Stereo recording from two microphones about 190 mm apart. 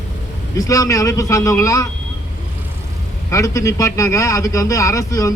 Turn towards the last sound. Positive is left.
turn(degrees=15)  # may be behind; listen again after turning